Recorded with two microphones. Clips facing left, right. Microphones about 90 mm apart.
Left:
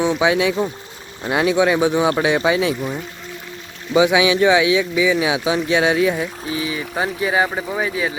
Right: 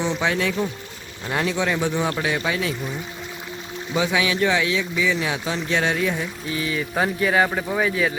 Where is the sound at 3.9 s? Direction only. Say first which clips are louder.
Left 7 dB; 10° left (ahead or behind).